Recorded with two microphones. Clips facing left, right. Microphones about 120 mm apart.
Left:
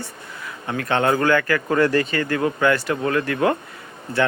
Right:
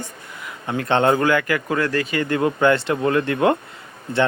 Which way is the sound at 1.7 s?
Centre (ahead or behind).